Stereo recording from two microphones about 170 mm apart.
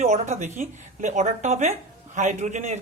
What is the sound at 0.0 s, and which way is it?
Speech, 40° right (ahead or behind).